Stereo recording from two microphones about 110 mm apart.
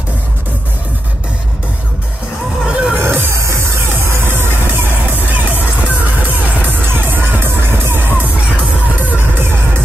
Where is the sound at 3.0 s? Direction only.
20° right (ahead or behind).